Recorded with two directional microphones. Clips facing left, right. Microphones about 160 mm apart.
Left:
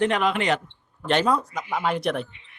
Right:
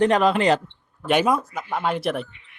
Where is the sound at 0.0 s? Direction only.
35° right (ahead or behind).